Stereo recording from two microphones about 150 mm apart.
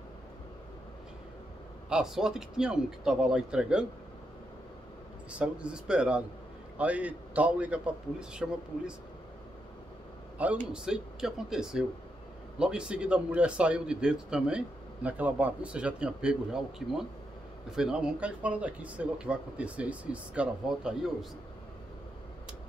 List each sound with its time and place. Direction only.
1.9 s speech: 5° right (ahead or behind)
5.3 s speech: 5° right (ahead or behind)
10.3 s a man's voice: 10° right (ahead or behind)